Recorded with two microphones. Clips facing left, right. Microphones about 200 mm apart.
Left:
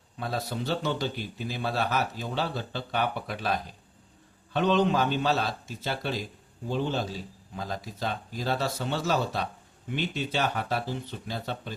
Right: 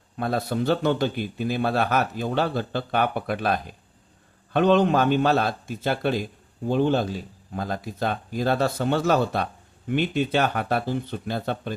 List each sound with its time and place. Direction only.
0.2 s speech: 55° right (ahead or behind)